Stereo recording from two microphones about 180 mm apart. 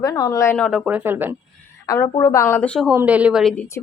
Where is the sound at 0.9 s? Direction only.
10° right (ahead or behind).